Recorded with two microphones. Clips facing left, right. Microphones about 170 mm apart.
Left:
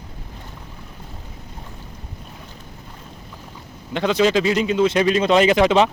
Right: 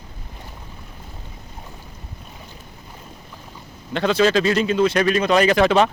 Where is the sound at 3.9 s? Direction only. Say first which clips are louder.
Even; 15° left (ahead or behind).